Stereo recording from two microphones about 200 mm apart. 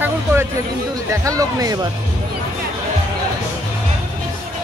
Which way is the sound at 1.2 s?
15° right (ahead or behind).